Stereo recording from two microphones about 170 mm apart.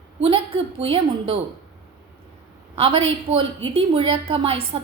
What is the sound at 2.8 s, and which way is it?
A woman's voice, 30° right (ahead or behind).